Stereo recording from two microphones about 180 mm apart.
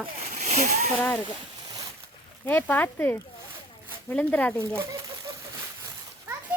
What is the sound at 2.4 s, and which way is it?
Speech, 10° left (ahead or behind).